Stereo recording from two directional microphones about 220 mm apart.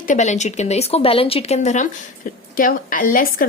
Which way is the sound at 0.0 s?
35° left (ahead or behind).